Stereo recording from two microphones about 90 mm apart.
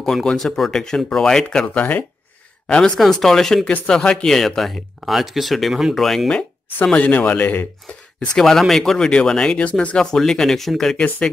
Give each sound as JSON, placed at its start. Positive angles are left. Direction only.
{"t": 0.0, "sound": "speech", "side_deg": 5}
{"t": 2.7, "sound": "speech", "side_deg": 5}
{"t": 6.9, "sound": "speech", "side_deg": 15}
{"t": 8.4, "sound": "speech", "side_deg": 5}